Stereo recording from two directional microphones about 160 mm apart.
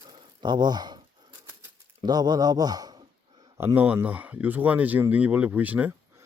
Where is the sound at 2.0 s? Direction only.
25° right (ahead or behind).